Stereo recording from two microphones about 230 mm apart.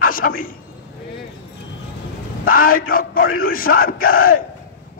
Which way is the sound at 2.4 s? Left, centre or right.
Left.